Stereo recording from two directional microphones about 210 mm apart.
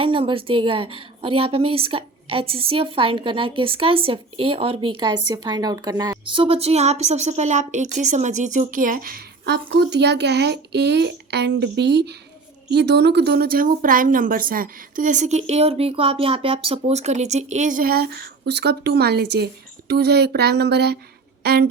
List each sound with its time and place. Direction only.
0.0 s a woman's voice: 25° right (ahead or behind); by 21.7 s 50° right (ahead or behind)